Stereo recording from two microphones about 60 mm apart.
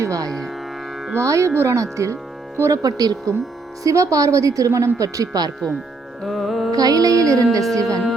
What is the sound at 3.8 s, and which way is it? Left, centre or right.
A woman's voice, right.